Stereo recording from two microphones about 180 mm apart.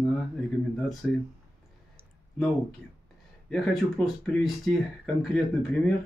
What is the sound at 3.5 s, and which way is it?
Speech, centre (ahead or behind).